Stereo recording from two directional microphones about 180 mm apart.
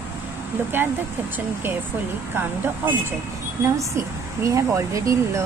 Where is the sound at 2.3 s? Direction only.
10° right (ahead or behind).